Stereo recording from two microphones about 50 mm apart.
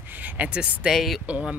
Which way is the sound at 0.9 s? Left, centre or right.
Centre.